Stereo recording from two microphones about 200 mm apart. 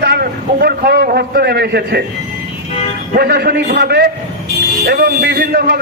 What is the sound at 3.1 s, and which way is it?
A man's voice, 50° right (ahead or behind).